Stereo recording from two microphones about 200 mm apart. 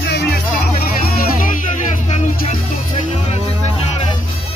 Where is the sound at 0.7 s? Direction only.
45° left (ahead or behind).